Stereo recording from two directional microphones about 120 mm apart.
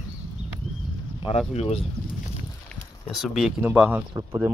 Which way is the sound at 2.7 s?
10° left (ahead or behind).